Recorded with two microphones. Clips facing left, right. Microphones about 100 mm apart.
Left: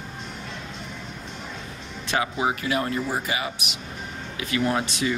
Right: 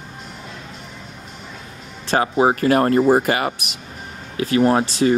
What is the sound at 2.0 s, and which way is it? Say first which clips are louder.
Speech: right 8 dB; 40° right (ahead or behind).